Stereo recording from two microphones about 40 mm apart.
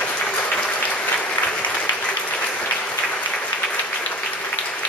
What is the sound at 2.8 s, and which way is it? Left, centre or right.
Applause, left.